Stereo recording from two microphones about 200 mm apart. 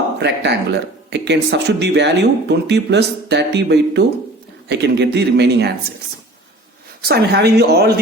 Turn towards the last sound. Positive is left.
turn(degrees=-50)  # may be behind; listen again after turning